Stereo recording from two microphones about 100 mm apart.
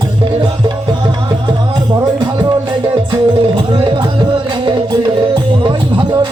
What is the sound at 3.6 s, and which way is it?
Music, 60° right (ahead or behind).